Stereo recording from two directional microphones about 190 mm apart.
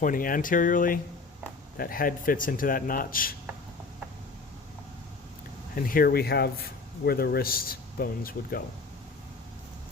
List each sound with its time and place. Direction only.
0.0 s speech: 45° left (ahead or behind)
5.7 s speech: 50° left (ahead or behind)